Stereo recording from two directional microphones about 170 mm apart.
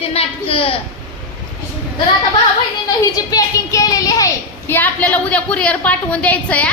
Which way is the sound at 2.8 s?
20° left (ahead or behind).